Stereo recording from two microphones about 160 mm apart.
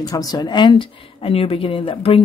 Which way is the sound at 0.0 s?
25° left (ahead or behind).